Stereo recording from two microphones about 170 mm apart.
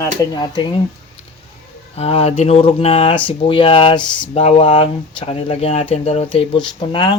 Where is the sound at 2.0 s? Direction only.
35° left (ahead or behind).